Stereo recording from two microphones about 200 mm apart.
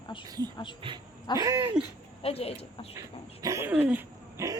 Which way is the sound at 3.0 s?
15° right (ahead or behind).